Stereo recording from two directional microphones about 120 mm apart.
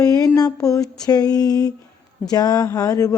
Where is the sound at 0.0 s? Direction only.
30° left (ahead or behind).